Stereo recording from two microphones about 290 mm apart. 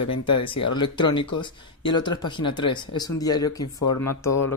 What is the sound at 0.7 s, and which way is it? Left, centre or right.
Speech, centre.